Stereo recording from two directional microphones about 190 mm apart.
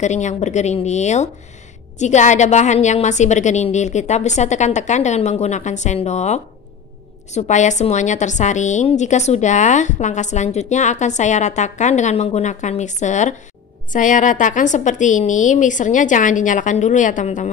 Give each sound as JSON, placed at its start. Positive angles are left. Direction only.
{"t": 0.0, "sound": "a woman's voice", "side_deg": 40}